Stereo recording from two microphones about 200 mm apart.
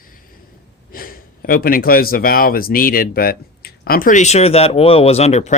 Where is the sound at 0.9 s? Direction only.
45° left (ahead or behind).